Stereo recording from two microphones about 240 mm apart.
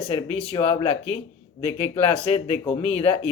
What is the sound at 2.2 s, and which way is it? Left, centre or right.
Speech, left.